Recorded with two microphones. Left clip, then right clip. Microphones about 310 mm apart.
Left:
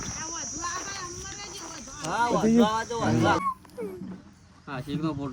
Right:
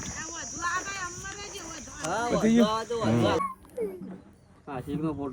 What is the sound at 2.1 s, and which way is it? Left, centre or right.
Speech, centre.